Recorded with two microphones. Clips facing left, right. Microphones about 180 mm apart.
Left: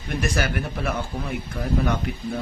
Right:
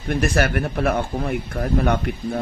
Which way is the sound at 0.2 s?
55° right (ahead or behind).